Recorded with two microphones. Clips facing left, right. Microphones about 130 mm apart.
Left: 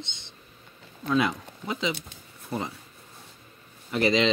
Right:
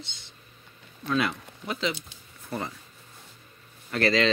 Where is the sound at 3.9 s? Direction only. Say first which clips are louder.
Left 1 dB; 15° left (ahead or behind).